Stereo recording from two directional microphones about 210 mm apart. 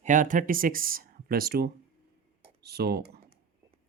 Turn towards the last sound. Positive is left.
turn(degrees=-50)  # may be behind; listen again after turning